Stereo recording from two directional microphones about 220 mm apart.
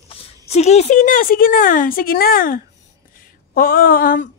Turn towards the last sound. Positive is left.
turn(degrees=40)  # may be behind; listen again after turning